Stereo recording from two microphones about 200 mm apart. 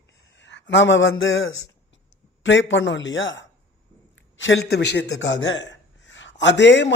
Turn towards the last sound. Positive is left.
turn(degrees=60)  # may be behind; listen again after turning